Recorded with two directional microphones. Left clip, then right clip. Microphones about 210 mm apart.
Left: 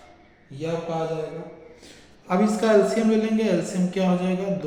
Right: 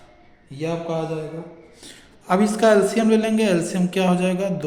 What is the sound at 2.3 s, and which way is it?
A woman's voice, 55° right (ahead or behind).